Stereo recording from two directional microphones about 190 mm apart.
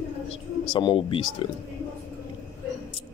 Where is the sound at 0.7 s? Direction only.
25° left (ahead or behind).